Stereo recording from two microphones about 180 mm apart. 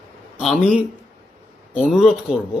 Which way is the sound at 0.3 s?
Centre (ahead or behind).